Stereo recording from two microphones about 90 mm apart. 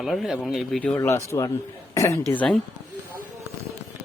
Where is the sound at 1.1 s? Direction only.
35° left (ahead or behind).